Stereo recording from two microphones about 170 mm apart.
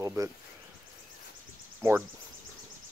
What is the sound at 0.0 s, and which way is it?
Speech, 20° right (ahead or behind).